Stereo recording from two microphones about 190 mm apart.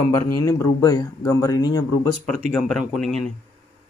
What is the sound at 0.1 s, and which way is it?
Speech, 15° left (ahead or behind).